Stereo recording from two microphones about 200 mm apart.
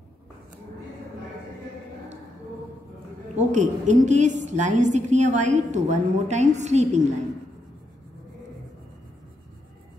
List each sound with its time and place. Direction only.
3.3 s a woman's voice: 35° right (ahead or behind)